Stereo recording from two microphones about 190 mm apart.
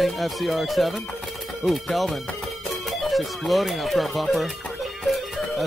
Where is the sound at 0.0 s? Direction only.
Centre (ahead or behind).